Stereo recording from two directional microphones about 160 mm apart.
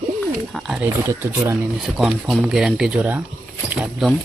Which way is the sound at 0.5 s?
5° right (ahead or behind).